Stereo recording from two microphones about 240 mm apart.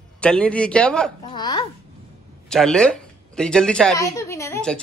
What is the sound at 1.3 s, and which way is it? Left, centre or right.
Speech, centre.